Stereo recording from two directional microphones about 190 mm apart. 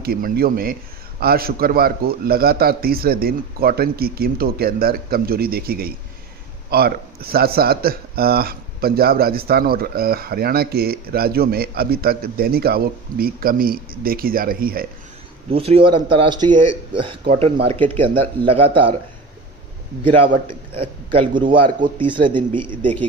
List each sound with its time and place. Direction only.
0.0 s speech: 50° right (ahead or behind)
15.5 s speech: 30° right (ahead or behind)
20.1 s speech: 30° right (ahead or behind)